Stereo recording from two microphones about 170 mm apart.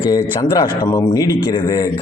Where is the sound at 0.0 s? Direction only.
25° left (ahead or behind).